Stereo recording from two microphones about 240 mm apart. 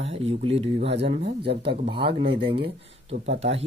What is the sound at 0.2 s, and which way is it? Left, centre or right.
Speech, right.